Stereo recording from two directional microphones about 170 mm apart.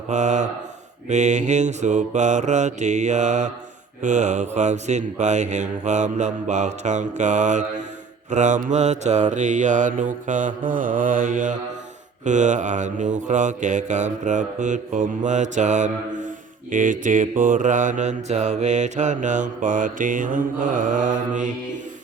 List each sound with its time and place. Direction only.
0.1 s mantra: 45° right (ahead or behind)